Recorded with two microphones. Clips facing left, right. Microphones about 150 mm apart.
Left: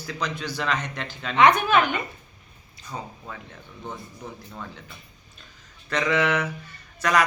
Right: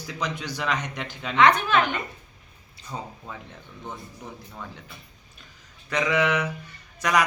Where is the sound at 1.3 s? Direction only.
15° left (ahead or behind).